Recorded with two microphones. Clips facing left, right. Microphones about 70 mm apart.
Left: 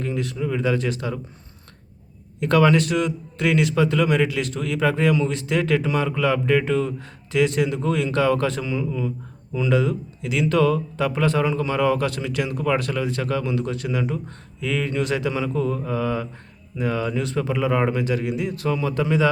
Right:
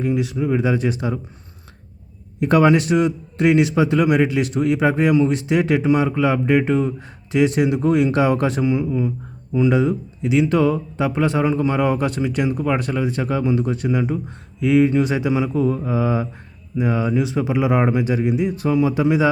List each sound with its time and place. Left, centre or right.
0.0 s speech: centre
0.3 s speech: right
2.4 s speech: centre